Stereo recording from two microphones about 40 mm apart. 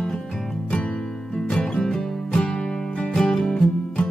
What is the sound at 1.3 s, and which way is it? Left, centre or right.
Music, centre.